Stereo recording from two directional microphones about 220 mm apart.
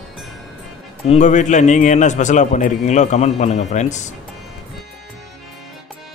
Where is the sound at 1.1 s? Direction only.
35° left (ahead or behind).